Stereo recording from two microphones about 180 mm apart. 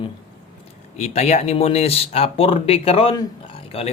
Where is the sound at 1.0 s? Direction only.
35° left (ahead or behind).